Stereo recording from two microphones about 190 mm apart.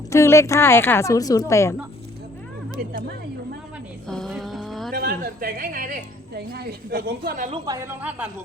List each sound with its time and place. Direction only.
0.1 s speech: 15° left (ahead or behind)
4.1 s a sound: centre (ahead or behind)
4.9 s a woman's voice: 50° right (ahead or behind)
7.5 s speech: 20° right (ahead or behind)